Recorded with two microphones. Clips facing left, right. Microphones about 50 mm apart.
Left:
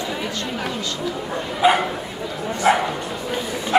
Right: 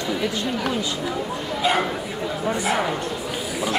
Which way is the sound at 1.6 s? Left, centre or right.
Centre.